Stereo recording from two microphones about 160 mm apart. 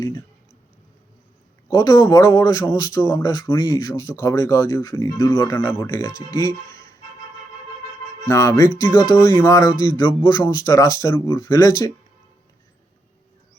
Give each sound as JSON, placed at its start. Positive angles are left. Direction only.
{"t": 1.6, "sound": "a man's voice", "side_deg": 20}
{"t": 8.3, "sound": "a man's voice", "side_deg": 20}